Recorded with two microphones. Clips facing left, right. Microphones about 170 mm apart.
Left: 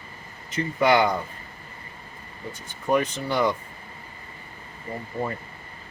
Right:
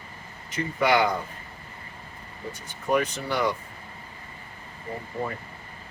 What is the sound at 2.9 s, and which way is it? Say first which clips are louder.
Speech: left 2 dB; 20° left (ahead or behind).